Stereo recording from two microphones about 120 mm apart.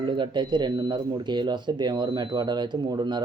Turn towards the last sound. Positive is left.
turn(degrees=-40)  # may be behind; listen again after turning